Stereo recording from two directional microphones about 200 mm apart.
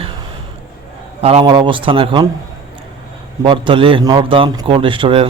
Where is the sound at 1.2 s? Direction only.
30° right (ahead or behind).